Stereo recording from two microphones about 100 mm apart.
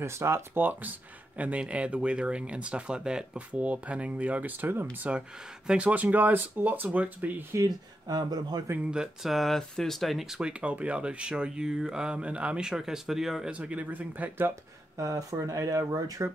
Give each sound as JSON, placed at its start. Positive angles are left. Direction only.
{"t": 0.0, "sound": "speech", "side_deg": -25}
{"t": 7.5, "sound": "speech", "side_deg": -40}
{"t": 8.7, "sound": "speech", "side_deg": -10}
{"t": 14.5, "sound": "speech", "side_deg": -35}